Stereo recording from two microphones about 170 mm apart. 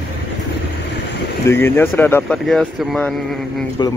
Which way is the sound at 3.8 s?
25° left (ahead or behind).